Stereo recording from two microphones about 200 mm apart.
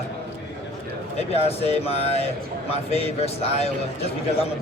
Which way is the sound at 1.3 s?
30° left (ahead or behind).